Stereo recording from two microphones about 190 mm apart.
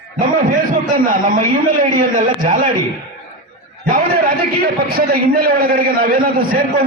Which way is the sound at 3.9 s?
50° right (ahead or behind).